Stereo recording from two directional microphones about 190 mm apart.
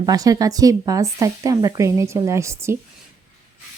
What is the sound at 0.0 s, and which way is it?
A woman's voice, 20° right (ahead or behind).